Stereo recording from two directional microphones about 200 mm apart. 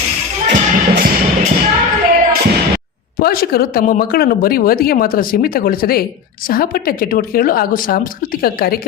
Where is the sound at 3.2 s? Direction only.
50° left (ahead or behind).